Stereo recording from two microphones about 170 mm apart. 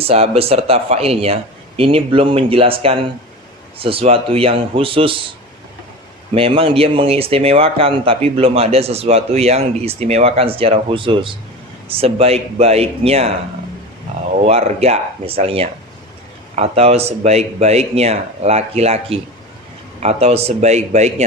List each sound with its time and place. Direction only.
0.0 s speech: 35° right (ahead or behind)
6.3 s speech: 35° right (ahead or behind)
14.3 s speech: 40° right (ahead or behind)